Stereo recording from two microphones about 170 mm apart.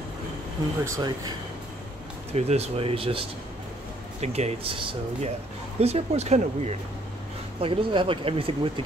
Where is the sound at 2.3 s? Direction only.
40° right (ahead or behind).